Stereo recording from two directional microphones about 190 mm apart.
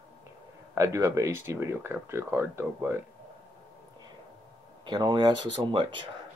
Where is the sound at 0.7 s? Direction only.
15° right (ahead or behind).